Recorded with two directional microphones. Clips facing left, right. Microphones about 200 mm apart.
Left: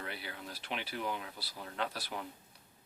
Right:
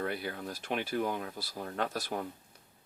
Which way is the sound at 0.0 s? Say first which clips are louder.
Right 9 dB; 45° right (ahead or behind).